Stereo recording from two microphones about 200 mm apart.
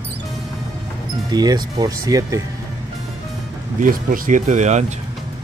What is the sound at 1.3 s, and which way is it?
Speech, 20° right (ahead or behind).